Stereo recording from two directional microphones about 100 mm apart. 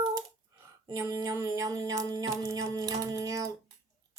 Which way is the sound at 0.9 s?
30° right (ahead or behind).